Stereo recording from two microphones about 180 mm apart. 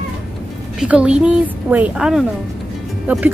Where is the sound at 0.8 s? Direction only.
5° right (ahead or behind).